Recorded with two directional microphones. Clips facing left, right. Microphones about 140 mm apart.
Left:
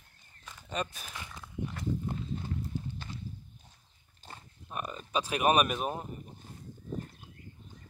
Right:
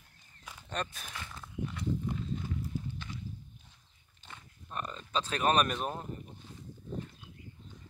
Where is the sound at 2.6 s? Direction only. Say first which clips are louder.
Even; 30° left (ahead or behind).